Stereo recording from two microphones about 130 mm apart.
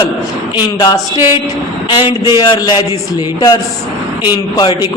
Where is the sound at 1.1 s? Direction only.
30° left (ahead or behind).